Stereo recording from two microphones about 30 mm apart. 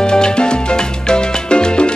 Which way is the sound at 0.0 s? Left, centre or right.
Left.